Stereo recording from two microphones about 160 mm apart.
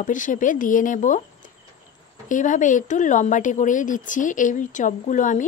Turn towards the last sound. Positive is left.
turn(degrees=50)  # may be behind; listen again after turning